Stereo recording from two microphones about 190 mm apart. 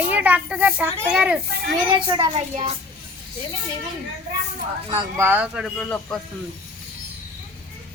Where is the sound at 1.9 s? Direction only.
25° right (ahead or behind).